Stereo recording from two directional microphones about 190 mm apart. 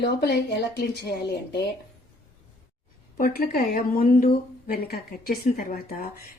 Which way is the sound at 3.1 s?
50° left (ahead or behind).